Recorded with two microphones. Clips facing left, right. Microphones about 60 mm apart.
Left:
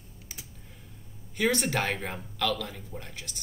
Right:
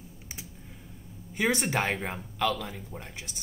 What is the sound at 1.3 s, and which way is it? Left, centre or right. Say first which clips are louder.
Speech: even; centre.